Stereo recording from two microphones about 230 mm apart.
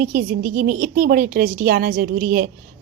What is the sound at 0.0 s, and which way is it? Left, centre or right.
Speech, right.